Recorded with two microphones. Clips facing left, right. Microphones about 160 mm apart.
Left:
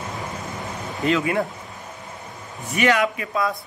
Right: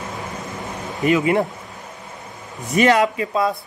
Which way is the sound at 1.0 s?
20° right (ahead or behind).